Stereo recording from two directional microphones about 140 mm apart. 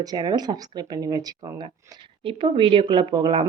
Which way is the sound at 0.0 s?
30° right (ahead or behind).